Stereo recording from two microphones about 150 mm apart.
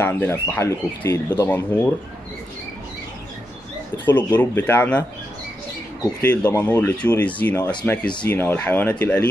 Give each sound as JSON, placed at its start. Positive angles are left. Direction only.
{"t": 0.0, "sound": "speech", "side_deg": 15}
{"t": 4.0, "sound": "speech", "side_deg": 15}
{"t": 6.2, "sound": "speech", "side_deg": 10}